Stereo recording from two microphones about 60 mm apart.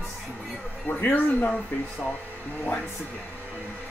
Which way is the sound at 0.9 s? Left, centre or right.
Left.